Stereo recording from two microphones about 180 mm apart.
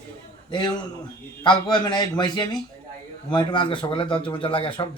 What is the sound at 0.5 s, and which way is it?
Speech, 25° left (ahead or behind).